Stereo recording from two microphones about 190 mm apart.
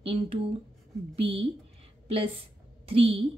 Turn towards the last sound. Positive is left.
turn(degrees=-30)  # may be behind; listen again after turning